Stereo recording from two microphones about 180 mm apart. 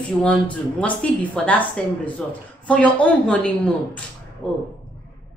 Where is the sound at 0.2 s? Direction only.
5° left (ahead or behind).